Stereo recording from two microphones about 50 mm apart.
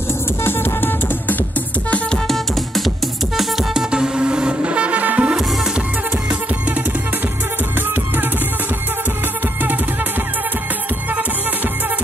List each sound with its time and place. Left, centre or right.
0.4 s music: left
2.2 s music: centre
3.9 s music: centre; by 5.3 s right